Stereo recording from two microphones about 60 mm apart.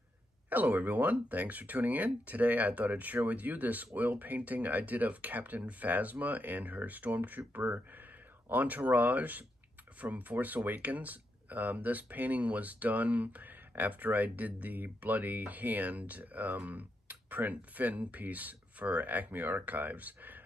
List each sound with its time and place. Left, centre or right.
0.5 s speech: right